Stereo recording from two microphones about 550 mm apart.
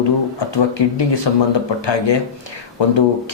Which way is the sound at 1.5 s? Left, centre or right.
Left.